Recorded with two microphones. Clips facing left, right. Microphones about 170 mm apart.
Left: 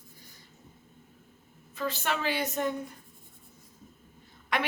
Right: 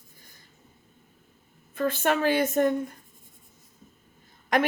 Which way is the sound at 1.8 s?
50° right (ahead or behind).